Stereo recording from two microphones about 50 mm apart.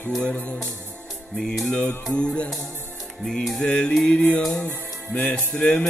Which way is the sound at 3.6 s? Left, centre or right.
Centre.